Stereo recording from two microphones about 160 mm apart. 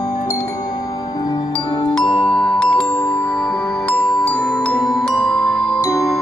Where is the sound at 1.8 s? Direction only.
35° left (ahead or behind).